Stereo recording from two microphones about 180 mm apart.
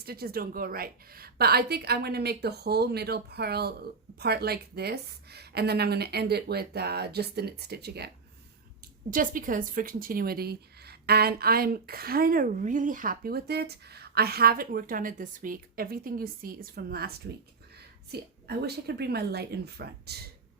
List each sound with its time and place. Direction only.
0.0 s speech: 60° right (ahead or behind)
9.0 s a woman's voice: 50° right (ahead or behind)